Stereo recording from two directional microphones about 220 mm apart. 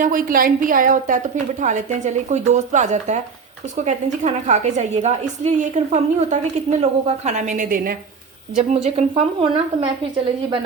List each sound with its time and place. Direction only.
0.0 s a woman's voice: 40° right (ahead or behind)
8.7 s a woman's voice: 30° right (ahead or behind)